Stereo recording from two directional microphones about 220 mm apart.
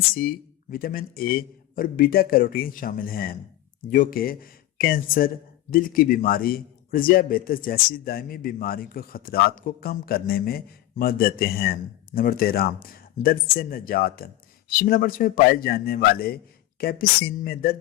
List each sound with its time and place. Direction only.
0.1 s a man's voice: 40° left (ahead or behind)